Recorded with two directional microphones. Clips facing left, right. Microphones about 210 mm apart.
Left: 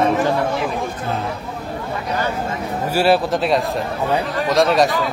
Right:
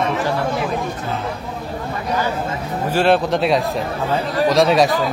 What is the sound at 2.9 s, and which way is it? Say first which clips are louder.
A man's voice: even; 5° left (ahead or behind).